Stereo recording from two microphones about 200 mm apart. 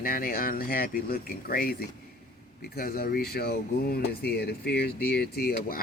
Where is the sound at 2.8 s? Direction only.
50° left (ahead or behind).